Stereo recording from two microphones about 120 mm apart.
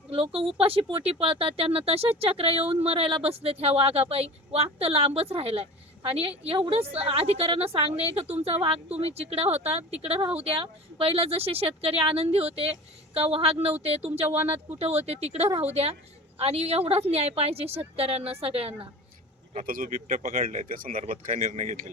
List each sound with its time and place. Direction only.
0.3 s a woman's voice: 50° right (ahead or behind)
19.5 s speech: 90° right